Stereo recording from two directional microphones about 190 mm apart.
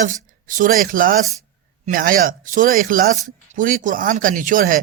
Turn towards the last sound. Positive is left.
turn(degrees=-45)  # may be behind; listen again after turning